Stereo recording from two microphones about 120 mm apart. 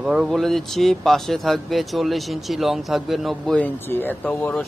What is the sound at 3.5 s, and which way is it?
Speech, 15° left (ahead or behind).